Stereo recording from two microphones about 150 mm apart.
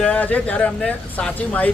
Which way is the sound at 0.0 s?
10° left (ahead or behind).